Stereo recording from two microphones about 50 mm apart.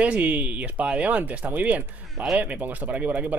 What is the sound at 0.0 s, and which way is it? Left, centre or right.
Speech, right.